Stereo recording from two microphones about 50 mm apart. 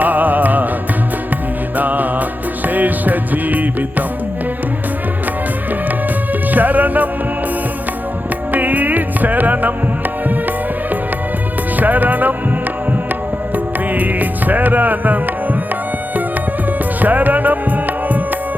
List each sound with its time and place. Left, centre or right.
0.0 s music: right
1.7 s music: right
6.5 s music: right
8.5 s music: right
11.8 s speech: right
13.9 s music: right
17.0 s music: right